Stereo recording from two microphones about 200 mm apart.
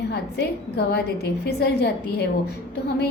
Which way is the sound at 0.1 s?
55° left (ahead or behind).